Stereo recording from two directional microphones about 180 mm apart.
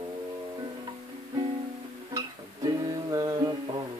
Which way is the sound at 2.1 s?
20° right (ahead or behind).